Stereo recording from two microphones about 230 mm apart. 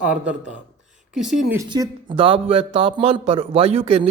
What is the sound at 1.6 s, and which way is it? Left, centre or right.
Speech, centre.